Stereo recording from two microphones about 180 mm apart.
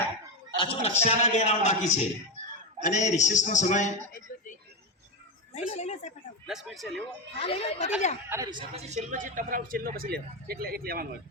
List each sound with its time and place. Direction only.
0.5 s a man's voice: 30° left (ahead or behind)
2.4 s a sound: 40° right (ahead or behind)
2.8 s a man's voice: 40° left (ahead or behind)
5.5 s a man's voice: 40° left (ahead or behind)
6.5 s speech: centre (ahead or behind)
7.3 s a man's voice: 30° left (ahead or behind)
8.3 s speech: 20° right (ahead or behind)
8.9 s speech: 45° right (ahead or behind)